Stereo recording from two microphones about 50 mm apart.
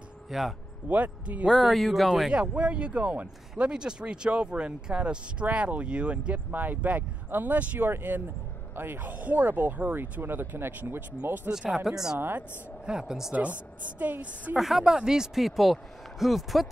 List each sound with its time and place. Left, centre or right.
0.3 s speech: centre
0.8 s speech: right
1.5 s speech: centre
2.2 s a woman's voice: centre
2.5 s speech: right
6.5 s speech: right
9.0 s speech: right
11.7 s a woman's voice: centre
13.3 s speech: right
14.6 s speech: centre